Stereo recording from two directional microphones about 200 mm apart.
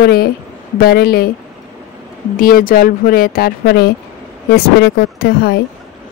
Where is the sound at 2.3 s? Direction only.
45° left (ahead or behind).